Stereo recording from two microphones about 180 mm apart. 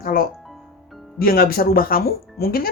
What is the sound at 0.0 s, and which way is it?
Music, 55° left (ahead or behind).